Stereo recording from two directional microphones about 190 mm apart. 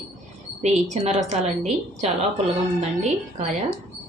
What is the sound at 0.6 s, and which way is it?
Speech, 35° right (ahead or behind).